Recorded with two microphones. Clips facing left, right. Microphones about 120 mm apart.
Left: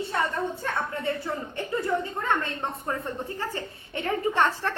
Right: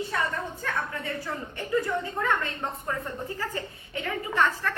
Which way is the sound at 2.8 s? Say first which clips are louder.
Left 1 dB; 25° left (ahead or behind).